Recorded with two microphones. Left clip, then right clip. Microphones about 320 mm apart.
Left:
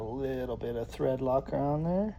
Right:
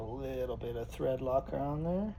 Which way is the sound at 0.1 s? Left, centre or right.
Left.